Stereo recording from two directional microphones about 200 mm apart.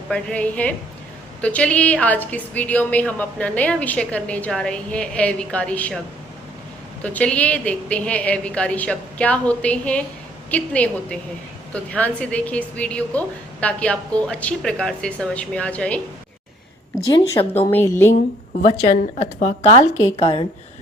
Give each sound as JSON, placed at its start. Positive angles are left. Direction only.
{"t": 0.1, "sound": "a woman's voice", "side_deg": 5}
{"t": 7.0, "sound": "a woman's voice", "side_deg": 5}
{"t": 17.4, "sound": "a woman's voice", "side_deg": 20}
{"t": 18.6, "sound": "a woman's voice", "side_deg": 35}